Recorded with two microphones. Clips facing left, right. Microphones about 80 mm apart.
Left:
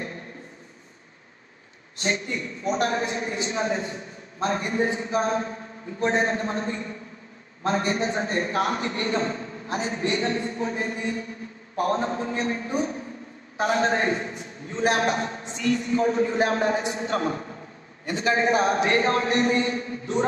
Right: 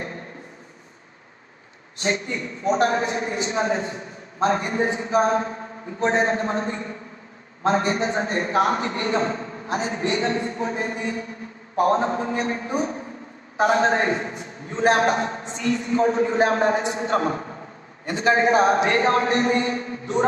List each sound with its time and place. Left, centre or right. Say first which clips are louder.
2.0 s a man's voice: right 2 dB; right